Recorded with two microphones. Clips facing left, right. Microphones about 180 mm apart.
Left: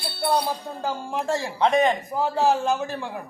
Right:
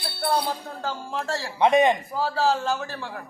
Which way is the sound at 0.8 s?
15° left (ahead or behind).